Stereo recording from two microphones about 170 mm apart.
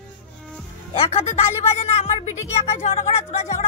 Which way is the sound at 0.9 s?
40° left (ahead or behind).